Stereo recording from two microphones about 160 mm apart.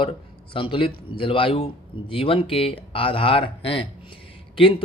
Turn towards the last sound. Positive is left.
turn(degrees=35)  # may be behind; listen again after turning